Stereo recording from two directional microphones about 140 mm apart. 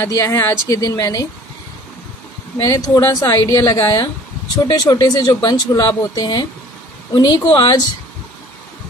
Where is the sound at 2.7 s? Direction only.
25° left (ahead or behind).